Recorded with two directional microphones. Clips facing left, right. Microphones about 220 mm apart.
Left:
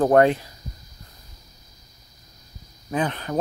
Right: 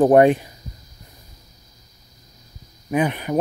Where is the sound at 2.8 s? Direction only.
15° right (ahead or behind).